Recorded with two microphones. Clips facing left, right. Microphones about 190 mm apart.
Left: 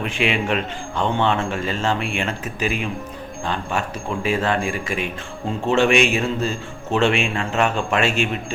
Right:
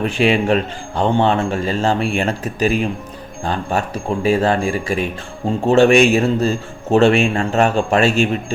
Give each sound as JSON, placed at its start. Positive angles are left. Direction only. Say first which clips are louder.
{"t": 0.0, "sound": "speech", "louder": "right 6 dB", "side_deg": -40}